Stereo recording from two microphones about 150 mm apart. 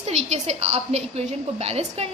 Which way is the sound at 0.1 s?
45° right (ahead or behind).